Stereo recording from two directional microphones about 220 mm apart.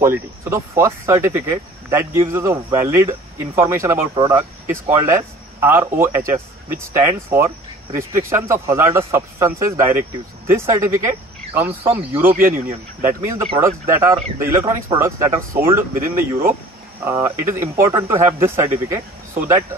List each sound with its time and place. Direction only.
0.0 s speech: 10° right (ahead or behind)